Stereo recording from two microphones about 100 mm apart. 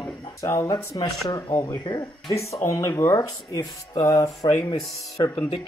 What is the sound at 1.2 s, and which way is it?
Speech, 40° left (ahead or behind).